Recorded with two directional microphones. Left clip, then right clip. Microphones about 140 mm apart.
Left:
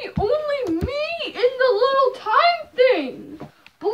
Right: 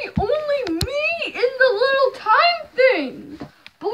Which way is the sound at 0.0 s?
35° right (ahead or behind).